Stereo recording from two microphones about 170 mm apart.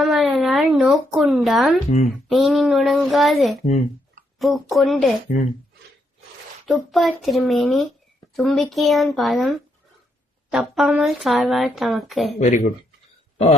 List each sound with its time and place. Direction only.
0.0 s a sound: centre (ahead or behind)
2.3 s a woman's voice: centre (ahead or behind)
6.7 s a woman's voice: centre (ahead or behind)
12.4 s speech: 45° left (ahead or behind)